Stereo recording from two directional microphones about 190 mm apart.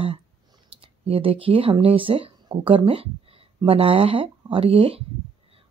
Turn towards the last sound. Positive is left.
turn(degrees=-30)  # may be behind; listen again after turning